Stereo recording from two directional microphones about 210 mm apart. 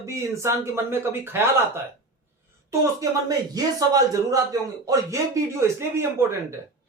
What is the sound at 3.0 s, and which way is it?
Speech, 15° right (ahead or behind).